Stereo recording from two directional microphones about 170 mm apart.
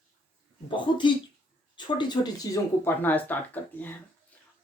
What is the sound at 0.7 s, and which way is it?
Speech, 25° left (ahead or behind).